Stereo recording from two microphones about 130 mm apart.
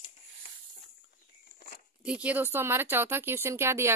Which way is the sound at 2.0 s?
10° right (ahead or behind).